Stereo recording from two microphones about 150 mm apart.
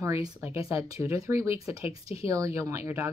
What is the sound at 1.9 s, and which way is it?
Speech, 40° left (ahead or behind).